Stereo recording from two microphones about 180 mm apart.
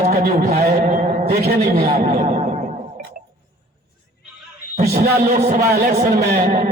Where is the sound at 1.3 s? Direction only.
60° right (ahead or behind).